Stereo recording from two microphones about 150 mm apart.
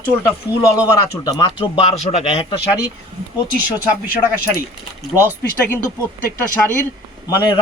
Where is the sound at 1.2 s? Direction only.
30° left (ahead or behind).